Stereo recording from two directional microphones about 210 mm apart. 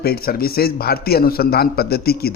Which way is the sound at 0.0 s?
45° left (ahead or behind).